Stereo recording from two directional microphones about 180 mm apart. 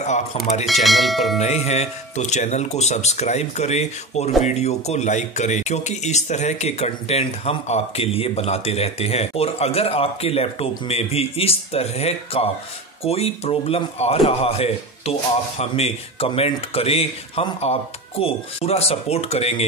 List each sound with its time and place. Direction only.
0.0 s speech: 40° left (ahead or behind)
0.8 s speech: centre (ahead or behind)
1.4 s speech: 40° left (ahead or behind)